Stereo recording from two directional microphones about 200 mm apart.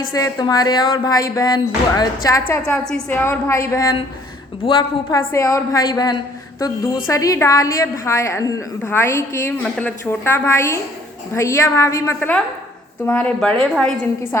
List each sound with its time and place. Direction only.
0.1 s speech: 20° left (ahead or behind)
2.5 s a woman's voice: 5° left (ahead or behind)